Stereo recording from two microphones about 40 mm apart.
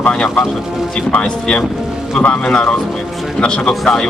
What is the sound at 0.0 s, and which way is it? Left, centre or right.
Speech, left.